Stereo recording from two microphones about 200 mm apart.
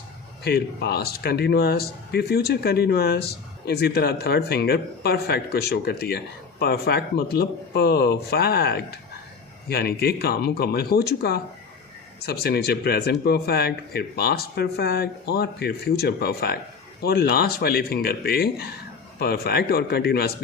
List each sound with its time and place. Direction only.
0.4 s speech: 50° left (ahead or behind)